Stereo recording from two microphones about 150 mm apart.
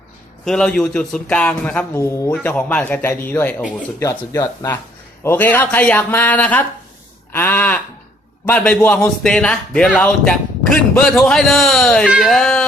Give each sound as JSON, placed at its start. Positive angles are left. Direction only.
{"t": 0.4, "sound": "a man's voice", "side_deg": 5}
{"t": 4.0, "sound": "a man's voice", "side_deg": 20}